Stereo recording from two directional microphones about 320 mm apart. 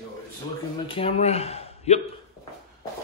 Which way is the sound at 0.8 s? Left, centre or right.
Centre.